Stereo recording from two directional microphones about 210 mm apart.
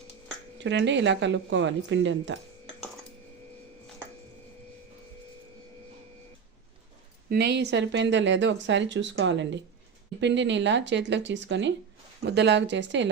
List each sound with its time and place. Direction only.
0.6 s speech: 60° right (ahead or behind)
7.3 s speech: 50° right (ahead or behind)